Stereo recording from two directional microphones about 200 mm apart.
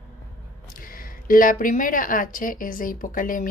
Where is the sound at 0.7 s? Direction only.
45° left (ahead or behind).